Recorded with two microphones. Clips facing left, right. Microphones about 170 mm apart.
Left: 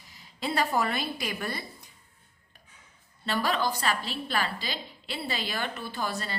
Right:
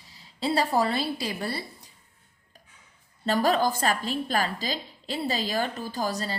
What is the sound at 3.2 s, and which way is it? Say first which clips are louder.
A woman's voice: right 5 dB; 40° right (ahead or behind).